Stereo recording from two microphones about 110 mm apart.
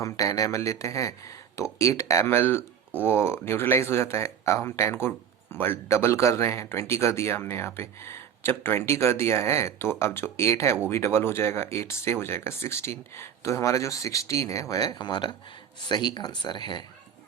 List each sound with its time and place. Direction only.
0.0 s speech: 30° left (ahead or behind)